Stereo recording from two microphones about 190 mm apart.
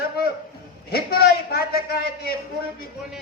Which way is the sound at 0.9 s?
55° left (ahead or behind).